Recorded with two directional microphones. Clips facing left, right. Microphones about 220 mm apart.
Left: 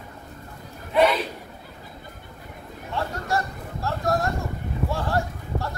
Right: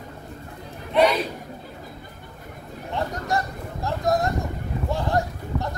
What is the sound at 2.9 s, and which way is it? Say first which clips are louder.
Speech: right 1 dB; 20° right (ahead or behind).